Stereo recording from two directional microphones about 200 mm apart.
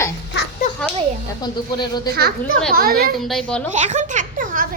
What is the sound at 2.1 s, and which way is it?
A child's voice, 55° right (ahead or behind).